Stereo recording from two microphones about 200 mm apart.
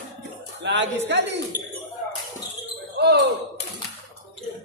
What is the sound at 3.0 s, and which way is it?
Ding, 55° right (ahead or behind).